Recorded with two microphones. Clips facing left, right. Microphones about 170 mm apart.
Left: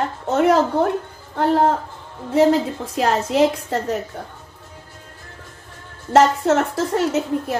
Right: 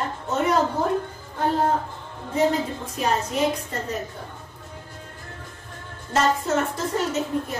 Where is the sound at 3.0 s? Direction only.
90° left.